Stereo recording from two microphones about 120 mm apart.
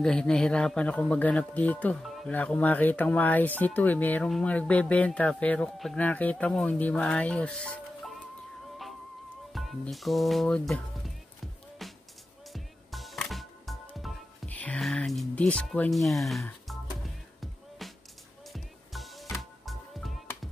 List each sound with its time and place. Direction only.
0.0 s speech: 5° left (ahead or behind)
2.0 s music: centre (ahead or behind)
2.3 s speech: 10° left (ahead or behind)
9.5 s speech: centre (ahead or behind)
11.8 s music: centre (ahead or behind)
14.5 s music: 15° left (ahead or behind)
15.3 s speech: 10° left (ahead or behind)
16.6 s music: centre (ahead or behind)